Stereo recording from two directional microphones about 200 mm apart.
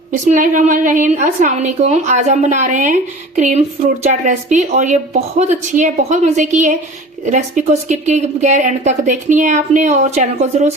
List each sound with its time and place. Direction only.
0.1 s a woman's voice: 40° right (ahead or behind)